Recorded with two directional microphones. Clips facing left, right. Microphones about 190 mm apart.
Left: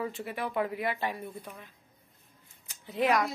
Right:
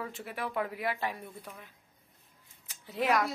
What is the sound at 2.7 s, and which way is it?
Speech, 5° right (ahead or behind).